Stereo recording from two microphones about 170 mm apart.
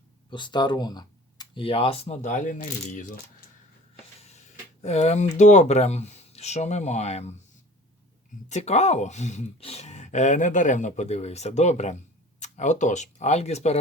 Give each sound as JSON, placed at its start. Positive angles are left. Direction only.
{"t": 0.3, "sound": "speech", "side_deg": 25}
{"t": 4.2, "sound": "speech", "side_deg": 40}
{"t": 8.4, "sound": "speech", "side_deg": 40}